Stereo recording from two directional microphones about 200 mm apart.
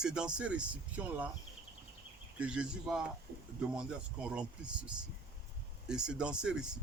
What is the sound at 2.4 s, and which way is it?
Speech, 5° right (ahead or behind).